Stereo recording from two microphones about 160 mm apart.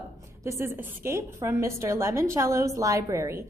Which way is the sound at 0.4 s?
20° right (ahead or behind).